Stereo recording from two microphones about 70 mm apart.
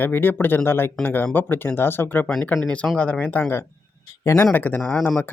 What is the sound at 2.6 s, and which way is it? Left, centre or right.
Speech, centre.